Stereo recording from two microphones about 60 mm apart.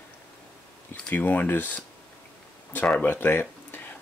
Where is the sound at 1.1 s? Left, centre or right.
Left.